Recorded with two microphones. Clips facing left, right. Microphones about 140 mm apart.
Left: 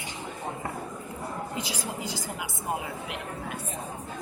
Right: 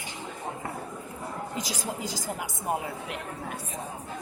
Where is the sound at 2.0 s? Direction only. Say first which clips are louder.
Right 1 dB; 45° right (ahead or behind).